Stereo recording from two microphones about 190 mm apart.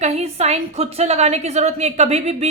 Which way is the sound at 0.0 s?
35° right (ahead or behind).